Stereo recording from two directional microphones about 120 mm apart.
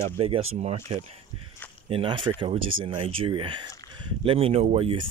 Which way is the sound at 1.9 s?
45° right (ahead or behind).